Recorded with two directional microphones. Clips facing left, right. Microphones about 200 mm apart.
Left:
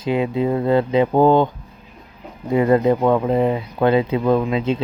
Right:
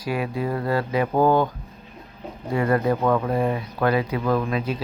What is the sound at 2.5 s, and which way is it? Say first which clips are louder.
Speech: left 6 dB; 20° left (ahead or behind).